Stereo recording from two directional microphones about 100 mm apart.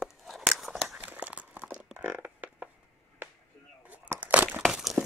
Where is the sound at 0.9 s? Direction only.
15° right (ahead or behind).